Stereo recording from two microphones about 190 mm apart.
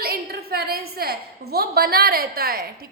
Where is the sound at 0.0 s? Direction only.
55° right (ahead or behind).